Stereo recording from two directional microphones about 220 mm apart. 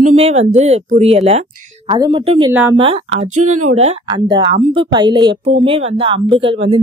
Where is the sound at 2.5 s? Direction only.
10° right (ahead or behind).